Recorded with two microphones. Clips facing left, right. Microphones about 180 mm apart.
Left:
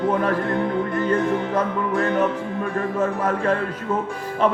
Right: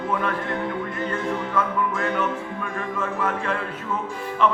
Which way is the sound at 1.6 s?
40° left (ahead or behind).